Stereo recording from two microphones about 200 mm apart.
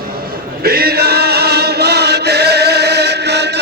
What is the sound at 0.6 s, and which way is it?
Chant, 50° right (ahead or behind).